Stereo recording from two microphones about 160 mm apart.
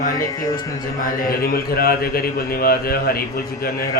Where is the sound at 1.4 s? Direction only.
70° left (ahead or behind).